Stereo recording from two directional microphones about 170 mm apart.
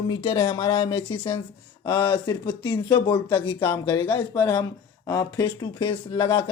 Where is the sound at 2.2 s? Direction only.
25° left (ahead or behind).